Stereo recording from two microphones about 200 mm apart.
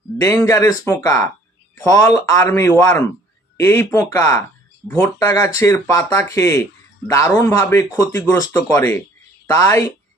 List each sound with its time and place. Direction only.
0.2 s a man's voice: 15° left (ahead or behind)